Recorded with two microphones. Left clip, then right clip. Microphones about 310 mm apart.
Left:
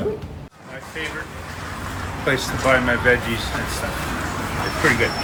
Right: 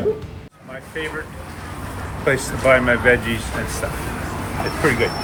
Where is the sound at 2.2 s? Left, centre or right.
Centre.